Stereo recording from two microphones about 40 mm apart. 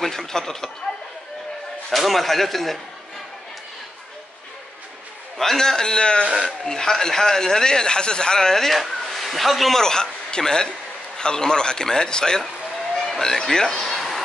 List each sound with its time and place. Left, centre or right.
0.0 s speech: centre
1.9 s a man's voice: centre
5.4 s speech: centre
9.8 s a man's voice: centre